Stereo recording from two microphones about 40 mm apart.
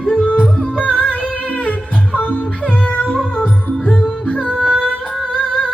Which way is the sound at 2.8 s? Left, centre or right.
Left.